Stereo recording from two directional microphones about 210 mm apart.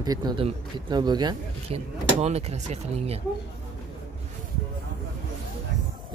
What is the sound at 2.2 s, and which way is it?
Speech, 30° right (ahead or behind).